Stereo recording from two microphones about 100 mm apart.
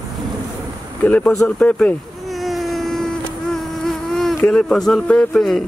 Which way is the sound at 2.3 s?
Centre (ahead or behind).